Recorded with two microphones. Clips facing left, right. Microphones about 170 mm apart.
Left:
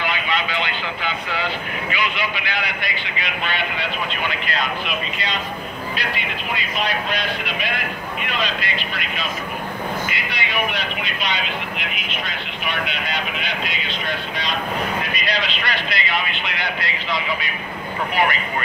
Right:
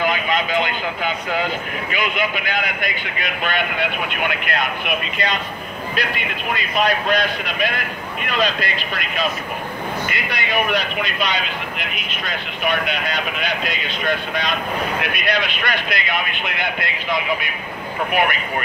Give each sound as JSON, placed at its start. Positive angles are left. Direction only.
{"t": 0.0, "sound": "speech", "side_deg": -45}
{"t": 8.3, "sound": "speech", "side_deg": -45}
{"t": 10.0, "sound": "speech", "side_deg": -45}
{"t": 12.6, "sound": "speech", "side_deg": -45}